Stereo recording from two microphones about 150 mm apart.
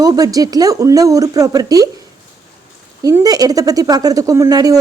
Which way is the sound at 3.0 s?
25° right (ahead or behind).